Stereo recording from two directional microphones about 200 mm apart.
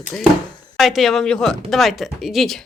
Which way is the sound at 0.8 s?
Centre (ahead or behind).